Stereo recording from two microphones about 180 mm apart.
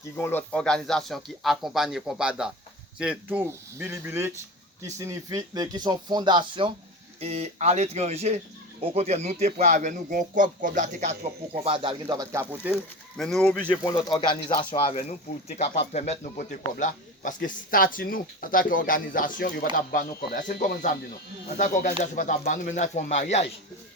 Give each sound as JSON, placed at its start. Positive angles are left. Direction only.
{"t": 0.2, "sound": "speech", "side_deg": 10}
{"t": 13.1, "sound": "speech", "side_deg": 5}
{"t": 13.8, "sound": "speech", "side_deg": 20}
{"t": 14.9, "sound": "speech", "side_deg": 40}